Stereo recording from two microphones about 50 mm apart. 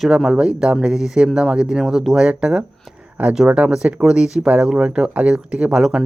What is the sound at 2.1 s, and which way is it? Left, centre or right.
Speech, centre.